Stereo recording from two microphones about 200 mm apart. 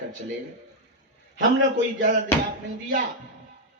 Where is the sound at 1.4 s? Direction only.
65° right (ahead or behind).